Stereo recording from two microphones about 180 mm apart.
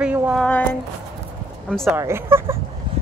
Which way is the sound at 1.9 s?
15° right (ahead or behind).